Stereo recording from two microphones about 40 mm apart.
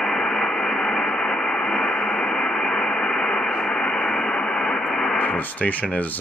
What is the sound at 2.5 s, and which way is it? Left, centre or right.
Radio, centre.